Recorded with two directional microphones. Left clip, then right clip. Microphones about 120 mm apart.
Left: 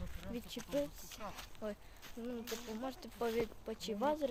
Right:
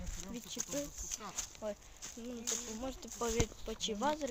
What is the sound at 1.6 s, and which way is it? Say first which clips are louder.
Speech: right 2 dB; 15° left (ahead or behind).